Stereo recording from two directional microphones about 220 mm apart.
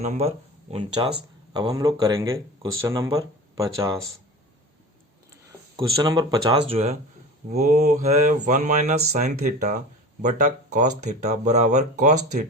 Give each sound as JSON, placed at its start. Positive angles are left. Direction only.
{"t": 0.0, "sound": "speech", "side_deg": -30}
{"t": 5.3, "sound": "speech", "side_deg": -15}